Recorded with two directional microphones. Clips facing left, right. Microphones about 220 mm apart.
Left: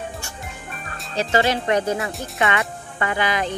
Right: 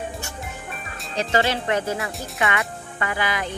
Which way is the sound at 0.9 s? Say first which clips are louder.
Left 2 dB; centre (ahead or behind).